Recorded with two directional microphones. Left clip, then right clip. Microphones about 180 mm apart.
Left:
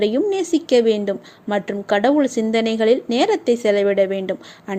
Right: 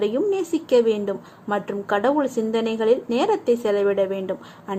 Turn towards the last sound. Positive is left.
turn(degrees=30)  # may be behind; listen again after turning